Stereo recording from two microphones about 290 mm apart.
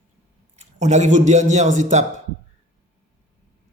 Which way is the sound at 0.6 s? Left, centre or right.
Right.